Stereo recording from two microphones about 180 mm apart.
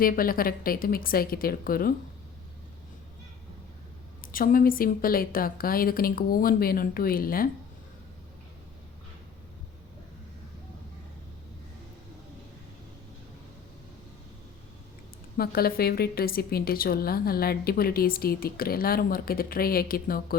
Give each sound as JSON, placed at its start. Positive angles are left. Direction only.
{"t": 0.0, "sound": "a woman's voice", "side_deg": 50}
{"t": 4.3, "sound": "a woman's voice", "side_deg": 50}
{"t": 15.4, "sound": "a woman's voice", "side_deg": 60}